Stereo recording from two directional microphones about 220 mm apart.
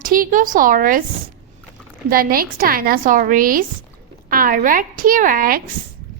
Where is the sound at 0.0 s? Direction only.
40° right (ahead or behind).